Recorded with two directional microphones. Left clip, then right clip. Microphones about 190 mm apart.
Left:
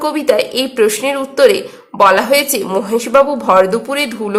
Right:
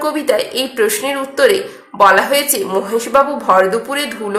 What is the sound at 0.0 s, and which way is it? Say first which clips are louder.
A woman's voice: left 2 dB; 35° left (ahead or behind).